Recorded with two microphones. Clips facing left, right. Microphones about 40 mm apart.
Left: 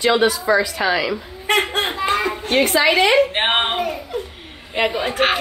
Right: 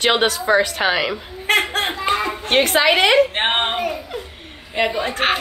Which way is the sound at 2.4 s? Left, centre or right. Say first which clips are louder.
Right 1 dB; right.